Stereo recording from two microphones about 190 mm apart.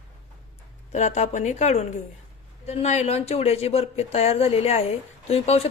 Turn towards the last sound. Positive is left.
turn(degrees=30)  # may be behind; listen again after turning